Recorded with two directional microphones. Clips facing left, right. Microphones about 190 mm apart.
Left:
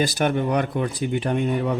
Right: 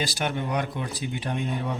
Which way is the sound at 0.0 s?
50° left (ahead or behind).